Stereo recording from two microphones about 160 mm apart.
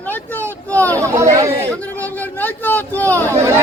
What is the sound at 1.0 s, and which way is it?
Speech, 20° right (ahead or behind).